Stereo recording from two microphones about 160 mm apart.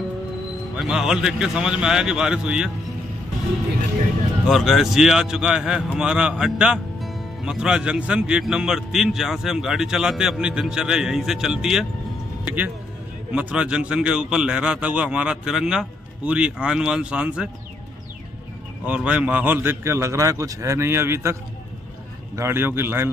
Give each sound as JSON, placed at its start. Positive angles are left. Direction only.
{"t": 0.7, "sound": "a man's voice", "side_deg": -5}
{"t": 4.5, "sound": "a man's voice", "side_deg": 0}
{"t": 18.9, "sound": "a man's voice", "side_deg": -5}